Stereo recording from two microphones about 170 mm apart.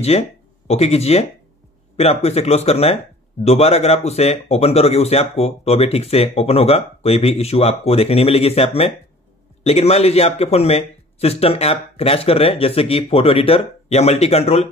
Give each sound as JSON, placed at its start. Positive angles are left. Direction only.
{"t": 0.1, "sound": "speech", "side_deg": 40}